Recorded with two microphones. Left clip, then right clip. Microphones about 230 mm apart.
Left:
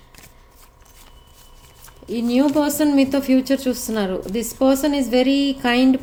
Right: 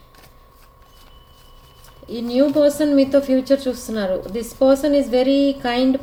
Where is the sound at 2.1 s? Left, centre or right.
Left.